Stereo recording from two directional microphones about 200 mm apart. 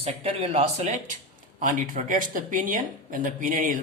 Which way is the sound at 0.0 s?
30° right (ahead or behind).